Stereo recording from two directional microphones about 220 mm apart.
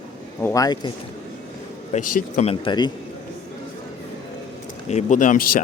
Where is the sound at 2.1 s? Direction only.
30° left (ahead or behind).